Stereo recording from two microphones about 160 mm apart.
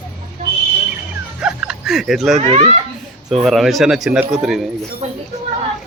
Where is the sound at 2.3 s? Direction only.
45° right (ahead or behind).